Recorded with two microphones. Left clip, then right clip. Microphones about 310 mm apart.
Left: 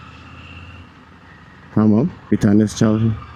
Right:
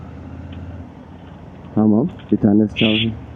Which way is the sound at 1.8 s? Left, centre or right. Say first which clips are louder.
Even; left.